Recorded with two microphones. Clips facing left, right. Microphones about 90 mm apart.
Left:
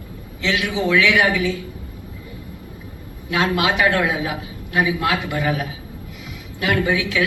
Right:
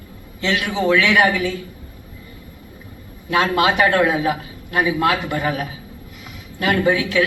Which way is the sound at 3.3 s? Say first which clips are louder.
Right 3 dB; 40° right (ahead or behind).